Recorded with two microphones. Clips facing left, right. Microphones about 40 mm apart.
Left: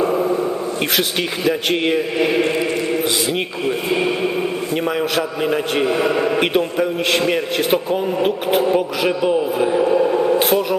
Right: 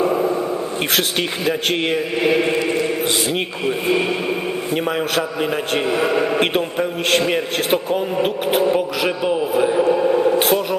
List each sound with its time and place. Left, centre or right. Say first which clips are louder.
0.9 s a man's voice: even; centre
2.2 s chant: right 2 dB; centre
3.2 s a man's voice: left 1 dB; centre
4.8 s chant: left 1 dB; centre
5.1 s a man's voice: left 1 dB; centre